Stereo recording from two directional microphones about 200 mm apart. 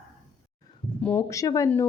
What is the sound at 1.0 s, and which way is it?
Speech, 10° left (ahead or behind).